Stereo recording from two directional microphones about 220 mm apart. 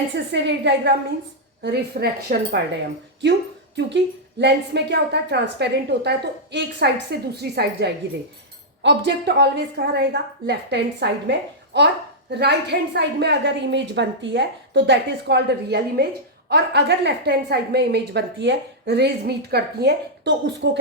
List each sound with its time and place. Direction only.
0.3 s a woman's voice: 50° right (ahead or behind)
3.8 s a woman's voice: 50° right (ahead or behind)